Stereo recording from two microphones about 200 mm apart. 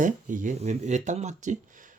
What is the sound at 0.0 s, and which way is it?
Speech, 40° right (ahead or behind).